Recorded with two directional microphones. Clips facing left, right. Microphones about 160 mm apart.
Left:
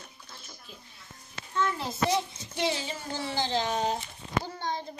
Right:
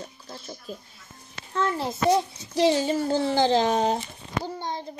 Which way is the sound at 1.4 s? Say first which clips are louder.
Right 1 dB; 65° right (ahead or behind).